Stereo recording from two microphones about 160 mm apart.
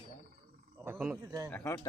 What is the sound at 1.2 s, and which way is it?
Speech, 20° right (ahead or behind).